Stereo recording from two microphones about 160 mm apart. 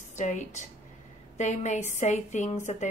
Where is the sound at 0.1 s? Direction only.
50° left (ahead or behind).